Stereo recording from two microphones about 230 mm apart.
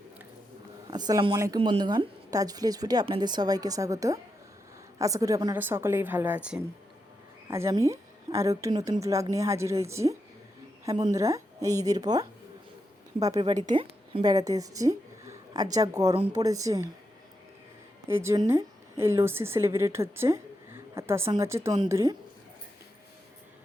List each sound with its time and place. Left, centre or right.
0.9 s a woman's voice: centre
18.1 s a woman's voice: centre